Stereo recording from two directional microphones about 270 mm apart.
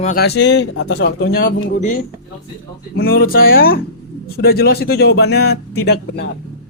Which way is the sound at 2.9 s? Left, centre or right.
Left.